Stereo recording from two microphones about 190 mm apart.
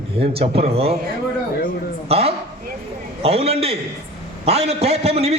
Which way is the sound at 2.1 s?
30° right (ahead or behind).